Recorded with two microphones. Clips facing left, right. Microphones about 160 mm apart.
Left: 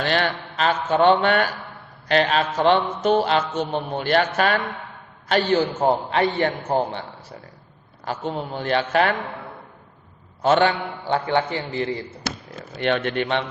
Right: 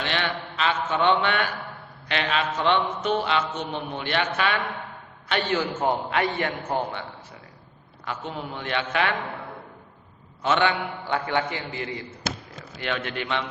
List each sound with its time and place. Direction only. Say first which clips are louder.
0.0 s mantra: left 5 dB; 40° left (ahead or behind)
8.0 s mantra: left 5 dB; 35° left (ahead or behind)
10.4 s mantra: left 5 dB; 35° left (ahead or behind)
12.7 s speech: left 8 dB; 55° left (ahead or behind)